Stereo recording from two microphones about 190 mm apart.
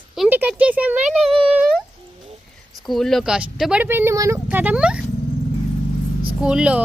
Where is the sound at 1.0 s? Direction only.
30° right (ahead or behind).